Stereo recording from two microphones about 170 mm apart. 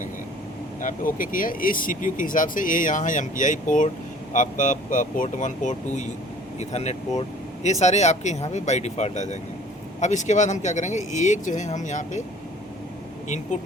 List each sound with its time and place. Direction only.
0.8 s speech: 55° left (ahead or behind)
13.2 s speech: 45° left (ahead or behind)